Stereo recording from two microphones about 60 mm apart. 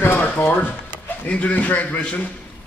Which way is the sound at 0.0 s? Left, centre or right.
Left.